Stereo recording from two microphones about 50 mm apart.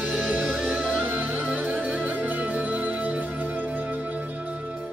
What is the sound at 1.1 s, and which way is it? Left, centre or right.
Music, right.